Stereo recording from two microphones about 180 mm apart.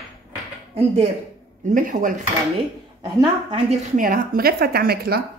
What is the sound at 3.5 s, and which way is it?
A woman's voice, 40° right (ahead or behind).